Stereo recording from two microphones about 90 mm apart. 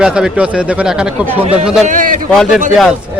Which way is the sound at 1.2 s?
20° right (ahead or behind).